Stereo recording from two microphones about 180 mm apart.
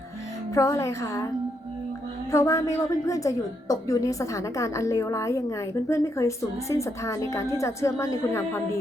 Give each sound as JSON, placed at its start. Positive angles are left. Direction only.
{"t": 0.5, "sound": "a woman's voice", "side_deg": 15}
{"t": 2.3, "sound": "a woman's voice", "side_deg": 15}